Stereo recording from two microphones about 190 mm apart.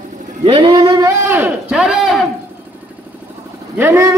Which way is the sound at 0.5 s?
30° right (ahead or behind).